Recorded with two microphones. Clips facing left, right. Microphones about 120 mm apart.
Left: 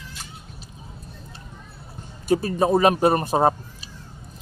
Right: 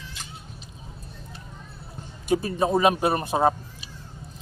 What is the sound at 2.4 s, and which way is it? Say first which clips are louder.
Speech: left 3 dB; 40° left (ahead or behind).